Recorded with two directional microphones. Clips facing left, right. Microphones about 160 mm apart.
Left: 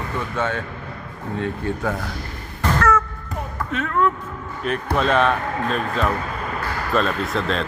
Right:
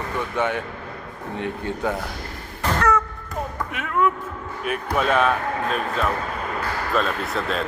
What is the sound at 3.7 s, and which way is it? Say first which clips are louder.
A man's voice: left 2 dB; 10° right (ahead or behind).